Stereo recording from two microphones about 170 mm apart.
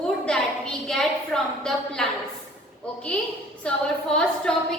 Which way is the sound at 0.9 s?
5° left (ahead or behind).